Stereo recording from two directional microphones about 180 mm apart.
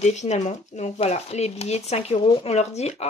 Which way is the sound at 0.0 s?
40° left (ahead or behind).